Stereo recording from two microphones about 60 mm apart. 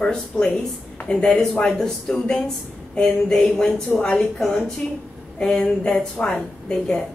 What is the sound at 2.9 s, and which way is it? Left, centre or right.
A woman's voice, centre.